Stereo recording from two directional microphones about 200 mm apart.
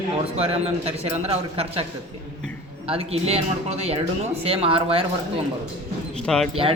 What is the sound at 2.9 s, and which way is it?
A man's voice, 30° right (ahead or behind).